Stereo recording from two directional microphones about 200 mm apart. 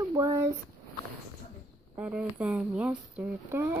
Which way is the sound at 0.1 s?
15° right (ahead or behind).